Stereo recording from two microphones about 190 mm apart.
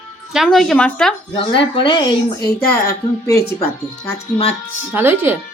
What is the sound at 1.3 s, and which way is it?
Speech, 25° left (ahead or behind).